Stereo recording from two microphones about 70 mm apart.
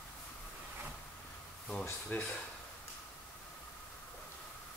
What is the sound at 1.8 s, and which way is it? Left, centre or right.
Speech, left.